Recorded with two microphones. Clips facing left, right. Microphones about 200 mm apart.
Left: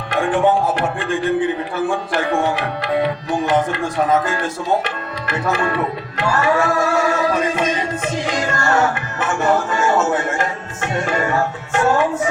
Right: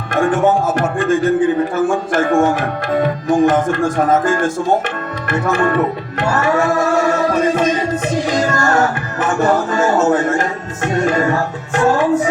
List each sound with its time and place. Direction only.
0.1 s speech: 45° right (ahead or behind)
7.3 s music: 40° right (ahead or behind)
10.9 s tabla: 40° right (ahead or behind)